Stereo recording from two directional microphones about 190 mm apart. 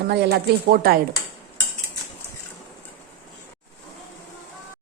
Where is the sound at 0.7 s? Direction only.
50° right (ahead or behind).